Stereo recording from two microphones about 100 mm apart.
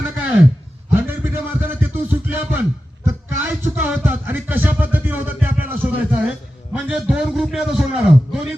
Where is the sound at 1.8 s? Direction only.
20° right (ahead or behind).